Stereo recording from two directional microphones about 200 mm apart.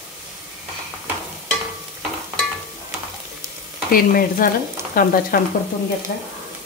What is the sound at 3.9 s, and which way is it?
Speech, 45° left (ahead or behind).